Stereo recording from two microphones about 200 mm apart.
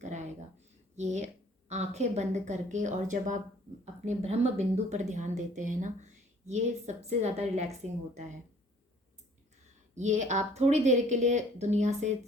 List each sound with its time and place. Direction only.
0.0 s a sound: 35° right (ahead or behind)
0.9 s speech: 35° right (ahead or behind)
9.9 s speech: 35° right (ahead or behind)